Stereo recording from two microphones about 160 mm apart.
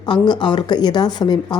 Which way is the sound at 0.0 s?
30° left (ahead or behind).